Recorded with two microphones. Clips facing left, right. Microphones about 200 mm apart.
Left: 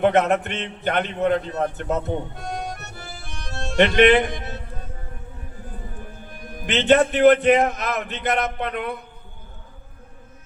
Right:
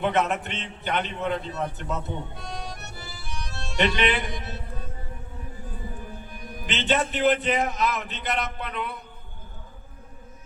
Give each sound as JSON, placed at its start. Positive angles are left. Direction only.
{"t": 0.0, "sound": "a man's voice", "side_deg": 50}
{"t": 6.3, "sound": "a man's voice", "side_deg": 50}